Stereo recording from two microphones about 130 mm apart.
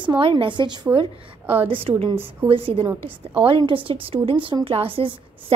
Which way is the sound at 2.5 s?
45° right (ahead or behind).